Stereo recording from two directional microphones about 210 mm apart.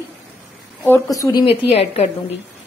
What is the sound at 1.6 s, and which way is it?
Speech, 30° left (ahead or behind).